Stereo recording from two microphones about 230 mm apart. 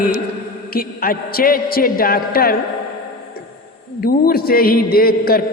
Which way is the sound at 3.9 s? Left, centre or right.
Left.